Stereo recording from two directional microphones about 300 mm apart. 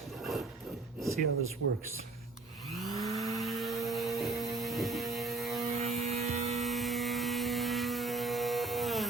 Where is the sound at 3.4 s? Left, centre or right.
Centre.